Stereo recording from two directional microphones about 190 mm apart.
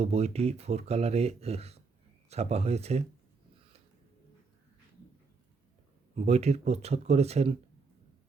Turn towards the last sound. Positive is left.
turn(degrees=-35)  # may be behind; listen again after turning